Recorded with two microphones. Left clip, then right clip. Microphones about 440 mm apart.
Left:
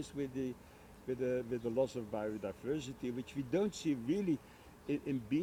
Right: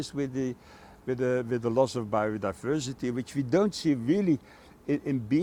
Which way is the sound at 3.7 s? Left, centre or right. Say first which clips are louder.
Right 10 dB; right.